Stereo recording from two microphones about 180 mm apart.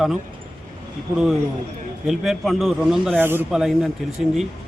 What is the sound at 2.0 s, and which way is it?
A man's voice, centre (ahead or behind).